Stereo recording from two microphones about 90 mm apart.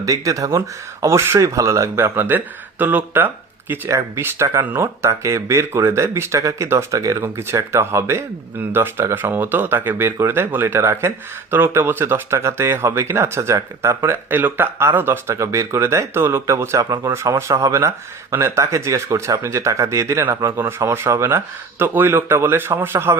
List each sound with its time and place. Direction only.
0.0 s speech: 40° right (ahead or behind); by 3.8 s 20° right (ahead or behind)
3.8 s speech: 35° right (ahead or behind)